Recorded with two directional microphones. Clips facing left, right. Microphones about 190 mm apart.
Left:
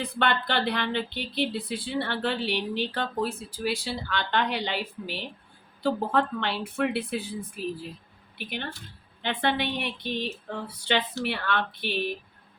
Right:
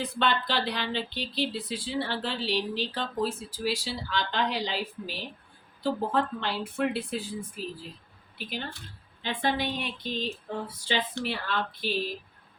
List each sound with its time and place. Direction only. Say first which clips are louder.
0.0 s speech: left 1 dB; 60° left (ahead or behind)
9.2 s speech: left 2 dB; 65° left (ahead or behind)